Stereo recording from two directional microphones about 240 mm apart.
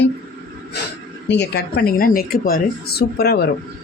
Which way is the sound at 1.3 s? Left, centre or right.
Left.